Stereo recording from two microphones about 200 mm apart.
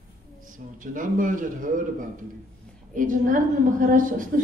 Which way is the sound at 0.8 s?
40° right (ahead or behind).